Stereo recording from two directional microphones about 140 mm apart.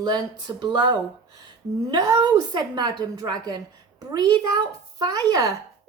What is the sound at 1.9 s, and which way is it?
A woman's voice, 30° right (ahead or behind).